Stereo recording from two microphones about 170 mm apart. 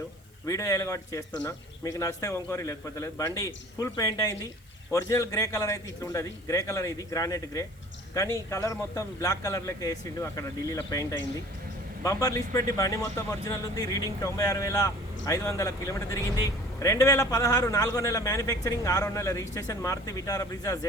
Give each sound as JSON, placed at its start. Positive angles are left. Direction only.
{"t": 0.4, "sound": "a man's voice", "side_deg": 20}